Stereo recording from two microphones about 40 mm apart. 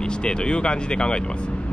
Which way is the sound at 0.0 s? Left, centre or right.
Left.